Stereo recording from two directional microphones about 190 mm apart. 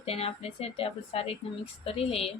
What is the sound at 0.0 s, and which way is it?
A woman's voice, 30° left (ahead or behind).